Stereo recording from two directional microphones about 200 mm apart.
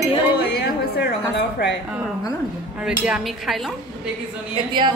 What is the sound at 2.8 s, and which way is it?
Speech, 5° right (ahead or behind).